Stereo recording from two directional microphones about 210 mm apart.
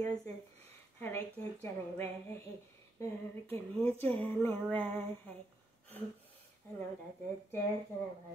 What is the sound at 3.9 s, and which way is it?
Speech, 10° left (ahead or behind).